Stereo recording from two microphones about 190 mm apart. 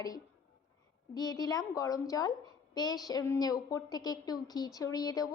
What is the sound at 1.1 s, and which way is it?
A woman's voice, 20° left (ahead or behind).